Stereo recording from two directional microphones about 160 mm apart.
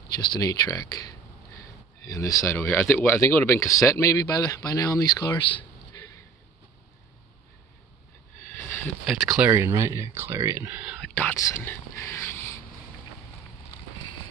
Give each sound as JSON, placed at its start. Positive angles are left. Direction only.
{"t": 0.2, "sound": "speech", "side_deg": 25}
{"t": 8.6, "sound": "a sound", "side_deg": 10}
{"t": 9.0, "sound": "speech", "side_deg": 0}
{"t": 9.5, "sound": "speech", "side_deg": -15}
{"t": 11.0, "sound": "speech", "side_deg": 10}